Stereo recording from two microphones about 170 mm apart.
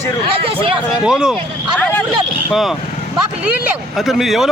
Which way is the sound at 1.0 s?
5° right (ahead or behind).